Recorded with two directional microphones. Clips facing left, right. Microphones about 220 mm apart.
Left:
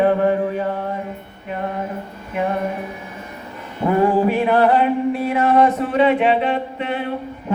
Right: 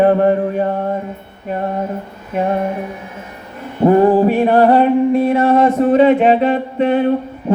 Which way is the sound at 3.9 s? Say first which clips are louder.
Right 6 dB; 40° right (ahead or behind).